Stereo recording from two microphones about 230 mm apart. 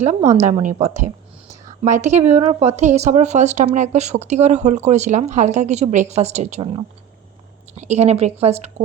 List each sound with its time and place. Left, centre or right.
0.3 s a woman's voice: right